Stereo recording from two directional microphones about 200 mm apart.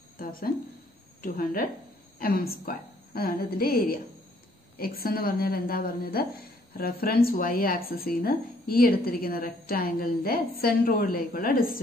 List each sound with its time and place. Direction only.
0.2 s speech: 45° left (ahead or behind)